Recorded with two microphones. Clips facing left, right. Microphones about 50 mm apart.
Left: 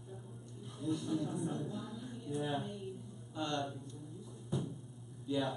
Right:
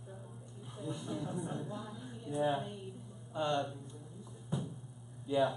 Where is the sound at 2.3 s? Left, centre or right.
Centre.